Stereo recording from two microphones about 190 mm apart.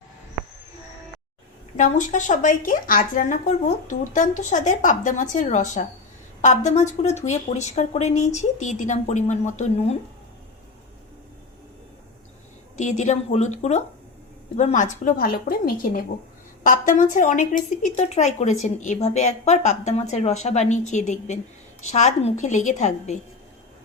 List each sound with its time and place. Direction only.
1.7 s a woman's voice: 40° left (ahead or behind)
12.7 s a woman's voice: 40° left (ahead or behind)